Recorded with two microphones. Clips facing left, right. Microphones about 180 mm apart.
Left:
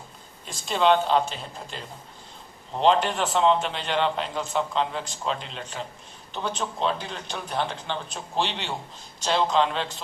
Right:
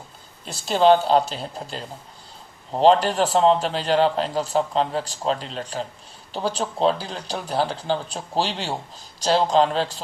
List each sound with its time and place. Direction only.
0.4 s a man's voice: 35° right (ahead or behind)